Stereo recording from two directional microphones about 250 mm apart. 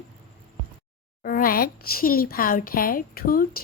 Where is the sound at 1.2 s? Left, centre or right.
Left.